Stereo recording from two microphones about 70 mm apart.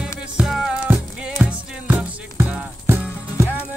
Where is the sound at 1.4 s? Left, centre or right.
Right.